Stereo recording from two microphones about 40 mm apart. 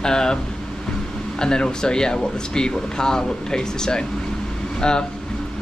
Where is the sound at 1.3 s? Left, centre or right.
Centre.